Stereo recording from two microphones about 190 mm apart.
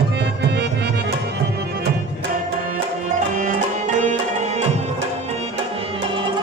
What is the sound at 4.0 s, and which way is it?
Music, 40° right (ahead or behind).